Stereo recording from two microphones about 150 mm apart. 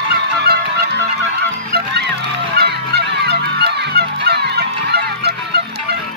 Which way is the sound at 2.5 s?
90° right.